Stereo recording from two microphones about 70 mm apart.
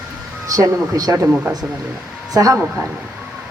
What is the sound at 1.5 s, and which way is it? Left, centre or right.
Speech, right.